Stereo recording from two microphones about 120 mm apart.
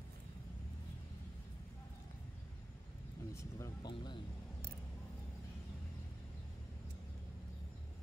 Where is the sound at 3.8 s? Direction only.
40° left (ahead or behind).